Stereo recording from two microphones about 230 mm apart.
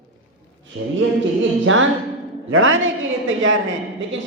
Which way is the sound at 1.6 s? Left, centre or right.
Right.